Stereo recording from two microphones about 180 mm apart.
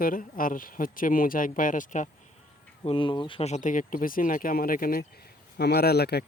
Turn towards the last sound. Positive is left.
turn(degrees=65)  # may be behind; listen again after turning